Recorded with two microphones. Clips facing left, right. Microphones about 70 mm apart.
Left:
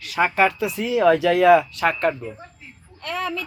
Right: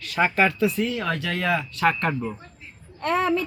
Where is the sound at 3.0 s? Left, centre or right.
Right.